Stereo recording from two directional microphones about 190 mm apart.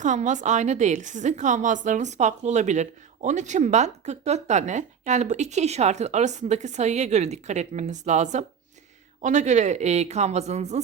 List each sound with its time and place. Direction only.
0.0 s a woman's voice: 40° right (ahead or behind)